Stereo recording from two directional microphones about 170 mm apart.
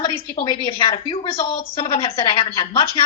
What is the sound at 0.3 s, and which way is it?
Speech, 30° left (ahead or behind).